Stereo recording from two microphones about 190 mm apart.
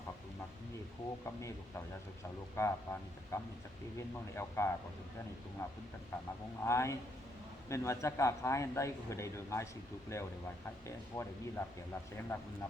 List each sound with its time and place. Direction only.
1.2 s speech: 15° left (ahead or behind)